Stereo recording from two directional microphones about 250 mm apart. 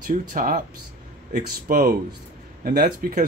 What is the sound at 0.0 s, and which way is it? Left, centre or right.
Speech, right.